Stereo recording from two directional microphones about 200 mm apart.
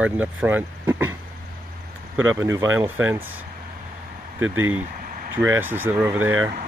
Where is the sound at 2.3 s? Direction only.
15° right (ahead or behind).